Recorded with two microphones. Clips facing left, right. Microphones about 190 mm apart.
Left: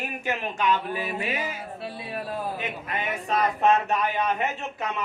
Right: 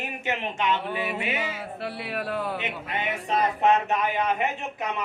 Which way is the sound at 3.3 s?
20° right (ahead or behind).